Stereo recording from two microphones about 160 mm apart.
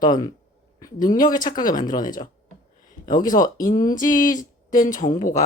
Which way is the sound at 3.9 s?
20° left (ahead or behind).